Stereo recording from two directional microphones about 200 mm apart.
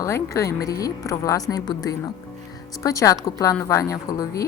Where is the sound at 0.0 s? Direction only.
15° left (ahead or behind).